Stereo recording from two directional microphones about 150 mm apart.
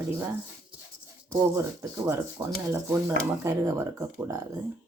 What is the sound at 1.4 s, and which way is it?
Speech, 25° right (ahead or behind).